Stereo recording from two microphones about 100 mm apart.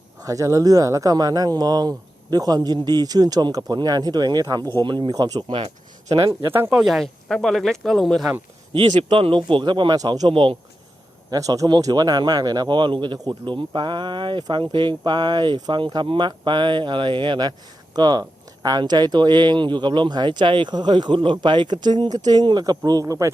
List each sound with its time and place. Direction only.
0.3 s speech: 35° right (ahead or behind)
4.8 s a man's voice: 50° right (ahead or behind)
5.5 s speech: 60° right (ahead or behind)
6.4 s speech: 20° right (ahead or behind)
6.7 s speech: centre (ahead or behind)
8.7 s a man's voice: 80° right; by 10.6 s 60° right (ahead or behind)
11.3 s a man's voice: 35° right (ahead or behind)